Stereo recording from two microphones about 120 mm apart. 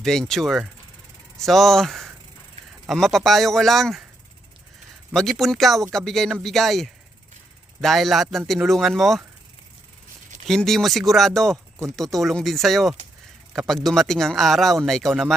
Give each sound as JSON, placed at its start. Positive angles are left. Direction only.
{"t": 0.0, "sound": "speech", "side_deg": 5}
{"t": 5.1, "sound": "speech", "side_deg": 0}
{"t": 10.4, "sound": "speech", "side_deg": 5}